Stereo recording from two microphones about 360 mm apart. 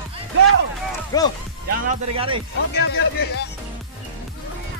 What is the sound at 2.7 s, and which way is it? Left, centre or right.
Speech, left.